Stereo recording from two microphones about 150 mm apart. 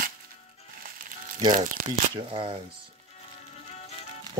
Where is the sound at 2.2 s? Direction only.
35° right (ahead or behind).